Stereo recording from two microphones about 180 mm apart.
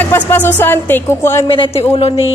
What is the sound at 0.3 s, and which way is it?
Music, 10° left (ahead or behind).